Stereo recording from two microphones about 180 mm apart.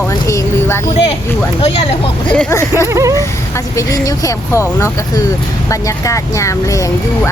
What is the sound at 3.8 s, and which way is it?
Speech, 20° left (ahead or behind).